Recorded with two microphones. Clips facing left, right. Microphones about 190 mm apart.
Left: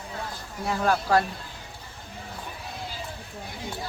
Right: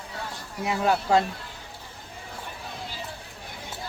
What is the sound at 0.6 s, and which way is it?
Speech, 15° right (ahead or behind).